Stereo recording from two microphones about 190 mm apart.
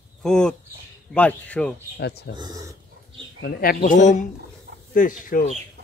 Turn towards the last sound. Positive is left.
turn(degrees=45)  # may be behind; listen again after turning